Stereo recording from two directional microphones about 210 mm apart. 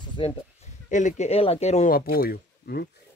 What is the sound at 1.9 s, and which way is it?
Speech, 45° left (ahead or behind).